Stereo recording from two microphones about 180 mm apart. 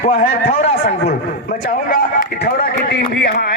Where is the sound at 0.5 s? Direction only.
40° left (ahead or behind).